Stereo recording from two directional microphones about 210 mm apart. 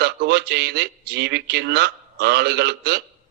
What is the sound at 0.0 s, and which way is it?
A man's voice, 50° right (ahead or behind).